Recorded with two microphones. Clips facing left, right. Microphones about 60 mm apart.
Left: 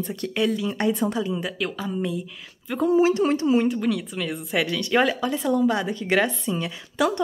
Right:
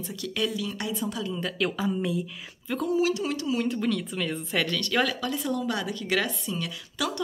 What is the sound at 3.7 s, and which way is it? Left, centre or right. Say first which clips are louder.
Speech: left 3 dB; centre.